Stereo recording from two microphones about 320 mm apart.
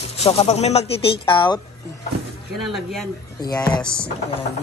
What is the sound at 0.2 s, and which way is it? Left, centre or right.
Speech, centre.